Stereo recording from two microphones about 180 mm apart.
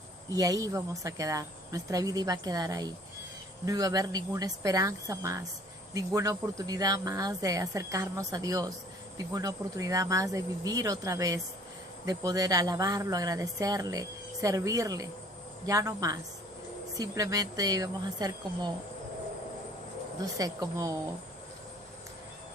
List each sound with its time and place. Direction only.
0.3 s speech: 20° right (ahead or behind)
20.4 s speech: 20° right (ahead or behind)